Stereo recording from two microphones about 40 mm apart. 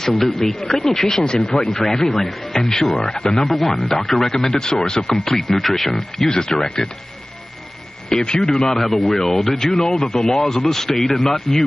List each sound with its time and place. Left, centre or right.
0.0 s speech: centre
3.4 s a man's voice: centre; by 7.0 s left
8.1 s a man's voice: left
8.7 s speech: centre